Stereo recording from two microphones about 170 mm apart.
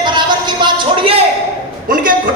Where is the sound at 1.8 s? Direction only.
55° right (ahead or behind).